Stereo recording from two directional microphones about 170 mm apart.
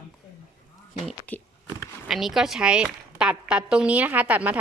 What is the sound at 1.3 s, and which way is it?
Speech, 10° left (ahead or behind).